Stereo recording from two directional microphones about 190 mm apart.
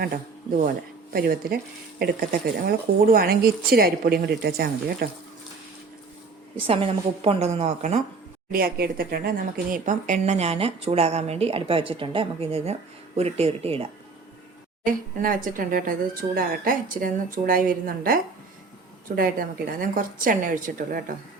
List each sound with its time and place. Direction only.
1.1 s speech: 55° right (ahead or behind)
6.6 s speech: 30° right (ahead or behind)
8.5 s speech: 50° right (ahead or behind); by 13.8 s 30° right (ahead or behind)
14.8 s speech: 45° right (ahead or behind)